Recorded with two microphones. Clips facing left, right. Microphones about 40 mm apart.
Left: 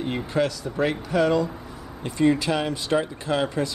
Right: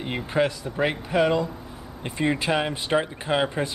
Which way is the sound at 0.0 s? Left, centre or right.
Right.